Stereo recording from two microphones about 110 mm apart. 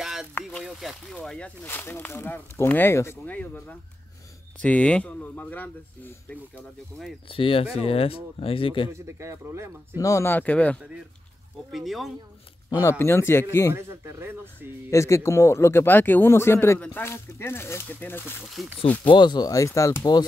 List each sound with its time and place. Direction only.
0.0 s a sound: 5° right (ahead or behind)
0.3 s speech: 20° left (ahead or behind)
0.7 s speech: centre (ahead or behind)
1.6 s speech: 20° left (ahead or behind)
7.2 s speech: 55° left (ahead or behind)
8.9 s speech: 25° right (ahead or behind)
9.9 s speech: 25° left (ahead or behind)
10.8 s speech: 10° right (ahead or behind)
13.0 s speech: 25° left (ahead or behind)
13.7 s speech: 25° right (ahead or behind)
14.9 s speech: 25° left (ahead or behind)
18.6 s speech: centre (ahead or behind)
19.0 s speech: 45° left (ahead or behind); by 20.0 s 30° left (ahead or behind)
20.0 s speech: 40° left (ahead or behind)